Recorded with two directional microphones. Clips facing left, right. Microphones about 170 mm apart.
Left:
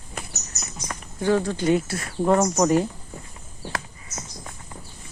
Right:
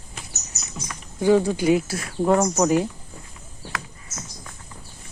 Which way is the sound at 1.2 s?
10° right (ahead or behind).